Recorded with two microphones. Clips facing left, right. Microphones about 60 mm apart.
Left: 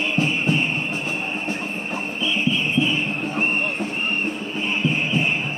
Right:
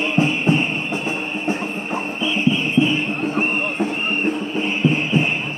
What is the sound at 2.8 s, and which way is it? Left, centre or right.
Music, right.